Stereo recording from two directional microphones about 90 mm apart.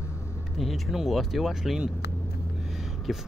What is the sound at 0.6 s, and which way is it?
Speech, centre (ahead or behind).